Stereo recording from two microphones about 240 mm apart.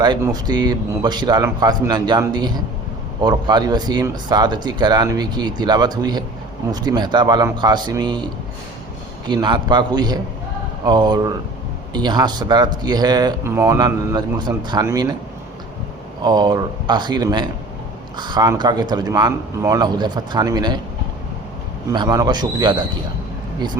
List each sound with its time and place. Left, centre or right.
0.0 s speech: centre
16.2 s speech: centre
21.9 s speech: centre